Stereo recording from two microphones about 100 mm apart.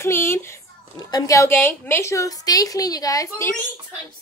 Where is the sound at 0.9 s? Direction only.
40° left (ahead or behind).